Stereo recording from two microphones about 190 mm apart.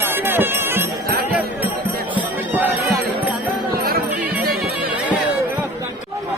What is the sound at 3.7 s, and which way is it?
Music, 50° right (ahead or behind).